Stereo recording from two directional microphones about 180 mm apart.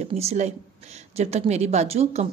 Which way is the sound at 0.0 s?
35° right (ahead or behind).